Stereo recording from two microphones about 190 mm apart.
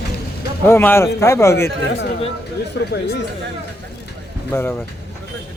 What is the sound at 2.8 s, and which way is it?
Speech, 60° left (ahead or behind).